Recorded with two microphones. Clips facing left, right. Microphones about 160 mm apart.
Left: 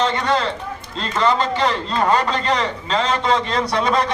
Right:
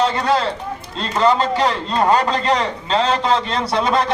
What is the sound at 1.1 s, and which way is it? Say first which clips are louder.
A man's voice: right 3 dB; 35° right (ahead or behind).